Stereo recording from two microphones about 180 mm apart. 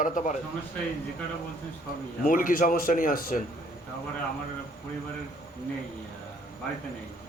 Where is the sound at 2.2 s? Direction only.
50° left (ahead or behind).